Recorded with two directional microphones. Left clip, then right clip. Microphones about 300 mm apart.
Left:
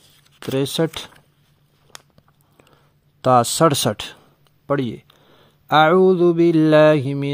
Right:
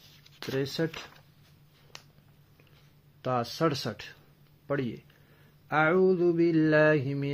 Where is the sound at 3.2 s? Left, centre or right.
Left.